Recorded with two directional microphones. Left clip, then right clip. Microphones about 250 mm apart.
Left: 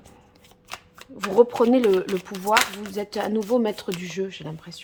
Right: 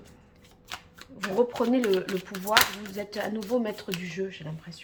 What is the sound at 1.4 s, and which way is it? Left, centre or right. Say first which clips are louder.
A woman's voice: left 8 dB; left.